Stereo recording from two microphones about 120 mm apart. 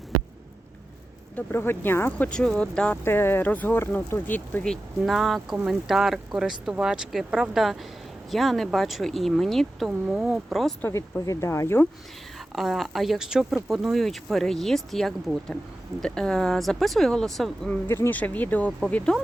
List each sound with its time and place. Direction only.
1.4 s speech: 20° left (ahead or behind)
3.0 s speech: 20° left (ahead or behind); by 10.8 s centre (ahead or behind)
10.8 s speech: 20° left (ahead or behind)
12.5 s speech: centre (ahead or behind)
17.7 s speech: 20° left (ahead or behind)